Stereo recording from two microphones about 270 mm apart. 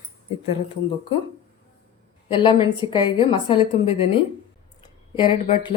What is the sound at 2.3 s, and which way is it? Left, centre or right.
A woman's voice, centre.